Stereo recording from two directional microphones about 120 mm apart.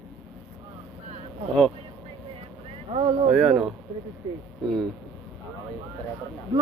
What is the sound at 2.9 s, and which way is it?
Speech, 50° right (ahead or behind).